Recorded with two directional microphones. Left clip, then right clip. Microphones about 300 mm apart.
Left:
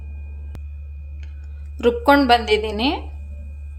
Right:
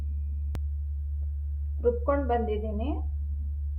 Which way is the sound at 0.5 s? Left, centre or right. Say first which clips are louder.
Right 2 dB; centre.